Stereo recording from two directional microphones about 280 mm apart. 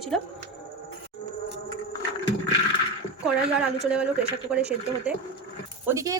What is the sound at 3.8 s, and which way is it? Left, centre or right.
Speech, centre.